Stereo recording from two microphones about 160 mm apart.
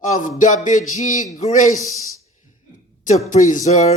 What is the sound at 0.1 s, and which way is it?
Speech, 50° left (ahead or behind).